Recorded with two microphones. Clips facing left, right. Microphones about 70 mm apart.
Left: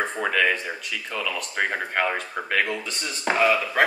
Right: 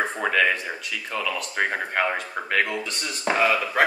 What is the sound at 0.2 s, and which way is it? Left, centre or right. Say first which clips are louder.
Speech: even; centre.